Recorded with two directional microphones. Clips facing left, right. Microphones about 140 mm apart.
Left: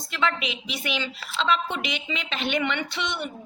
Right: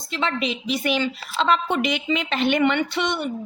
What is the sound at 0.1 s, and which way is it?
A woman's voice, 35° right (ahead or behind).